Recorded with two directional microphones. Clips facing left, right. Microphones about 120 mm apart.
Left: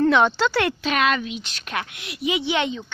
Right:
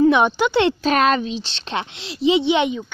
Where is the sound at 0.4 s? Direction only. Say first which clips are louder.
Right 4 dB; 20° right (ahead or behind).